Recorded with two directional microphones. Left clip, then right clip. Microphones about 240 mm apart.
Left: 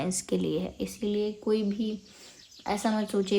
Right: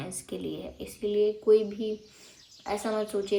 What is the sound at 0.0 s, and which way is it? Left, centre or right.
Speech, left.